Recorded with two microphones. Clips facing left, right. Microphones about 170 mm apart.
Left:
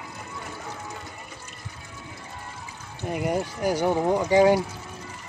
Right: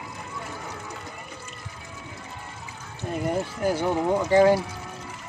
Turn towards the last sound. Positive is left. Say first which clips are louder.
# even
turn(degrees=15)  # may be behind; listen again after turning